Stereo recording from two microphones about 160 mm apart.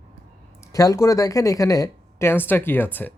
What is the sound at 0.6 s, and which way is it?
Speech, 20° left (ahead or behind).